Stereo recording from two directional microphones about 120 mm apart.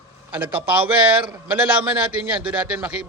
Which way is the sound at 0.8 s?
45° right (ahead or behind).